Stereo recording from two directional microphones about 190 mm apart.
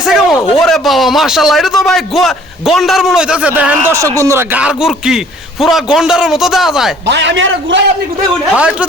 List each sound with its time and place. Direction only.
0.0 s speech: centre (ahead or behind)
7.1 s a man's voice: 70° right (ahead or behind)
8.5 s speech: 5° right (ahead or behind)